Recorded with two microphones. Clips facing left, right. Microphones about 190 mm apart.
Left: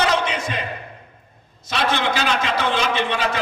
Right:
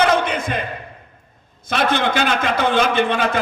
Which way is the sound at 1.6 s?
50° right (ahead or behind).